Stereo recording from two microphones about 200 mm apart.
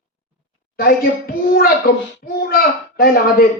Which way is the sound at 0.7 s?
50° left (ahead or behind).